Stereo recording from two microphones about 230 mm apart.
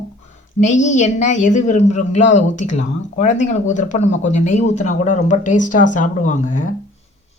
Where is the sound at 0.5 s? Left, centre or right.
Left.